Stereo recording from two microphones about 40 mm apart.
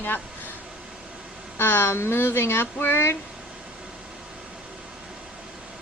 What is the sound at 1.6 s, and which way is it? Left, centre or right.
Speech, left.